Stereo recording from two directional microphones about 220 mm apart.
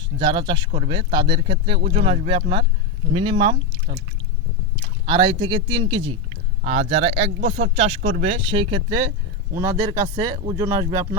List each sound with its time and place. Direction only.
0.2 s speech: 20° right (ahead or behind)
5.0 s speech: 20° right (ahead or behind)